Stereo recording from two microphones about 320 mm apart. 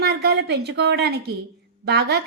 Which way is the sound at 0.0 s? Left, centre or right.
Right.